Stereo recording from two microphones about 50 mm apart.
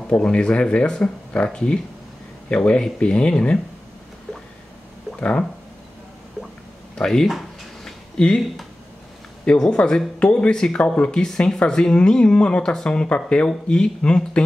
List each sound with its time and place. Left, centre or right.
0.1 s speech: left
7.0 s speech: centre
7.8 s a sound: centre
9.6 s speech: centre